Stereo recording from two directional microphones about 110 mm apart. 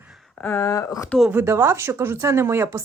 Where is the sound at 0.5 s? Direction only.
30° left (ahead or behind).